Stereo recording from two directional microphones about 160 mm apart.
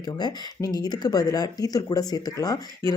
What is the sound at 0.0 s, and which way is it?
Speech, 25° left (ahead or behind).